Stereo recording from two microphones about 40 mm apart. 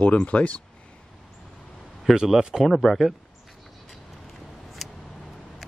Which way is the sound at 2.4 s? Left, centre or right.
Centre.